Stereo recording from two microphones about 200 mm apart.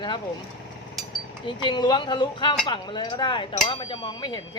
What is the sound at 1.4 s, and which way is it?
Speech, 20° left (ahead or behind).